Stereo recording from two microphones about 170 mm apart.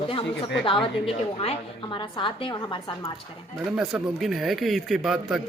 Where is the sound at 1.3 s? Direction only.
30° left (ahead or behind).